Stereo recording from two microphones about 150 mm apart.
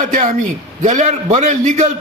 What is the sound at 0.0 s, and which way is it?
A man's voice, 60° right (ahead or behind).